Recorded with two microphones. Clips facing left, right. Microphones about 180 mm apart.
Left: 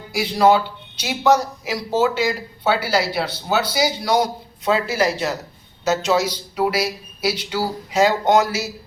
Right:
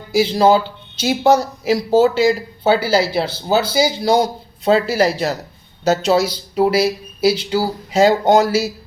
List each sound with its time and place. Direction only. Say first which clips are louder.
0.1 s speech: right 3 dB; 25° right (ahead or behind)